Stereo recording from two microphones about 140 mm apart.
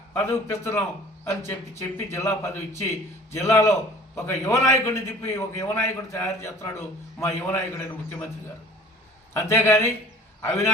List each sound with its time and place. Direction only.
0.2 s a man's voice: 20° left (ahead or behind)
9.3 s a man's voice: 20° left (ahead or behind)